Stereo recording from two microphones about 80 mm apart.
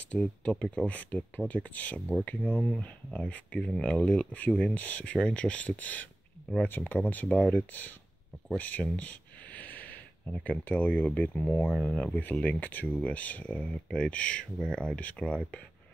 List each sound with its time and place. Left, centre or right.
0.1 s speech: centre